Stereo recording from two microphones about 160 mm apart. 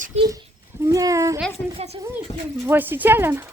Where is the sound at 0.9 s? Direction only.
20° right (ahead or behind).